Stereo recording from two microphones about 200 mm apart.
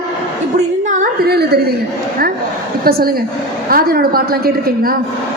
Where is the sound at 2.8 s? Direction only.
50° right (ahead or behind).